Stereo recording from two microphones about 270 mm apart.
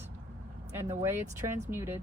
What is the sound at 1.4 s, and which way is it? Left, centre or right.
Speech, right.